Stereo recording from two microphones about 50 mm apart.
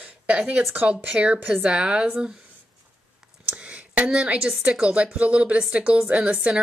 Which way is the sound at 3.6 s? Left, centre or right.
Right.